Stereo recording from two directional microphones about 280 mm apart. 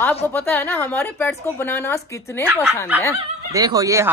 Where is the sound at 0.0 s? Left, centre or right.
Centre.